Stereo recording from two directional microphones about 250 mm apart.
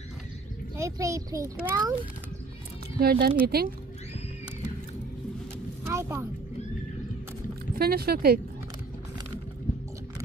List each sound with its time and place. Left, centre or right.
0.7 s a child's voice: centre
3.0 s speech: right
5.9 s a woman's voice: centre
7.7 s speech: right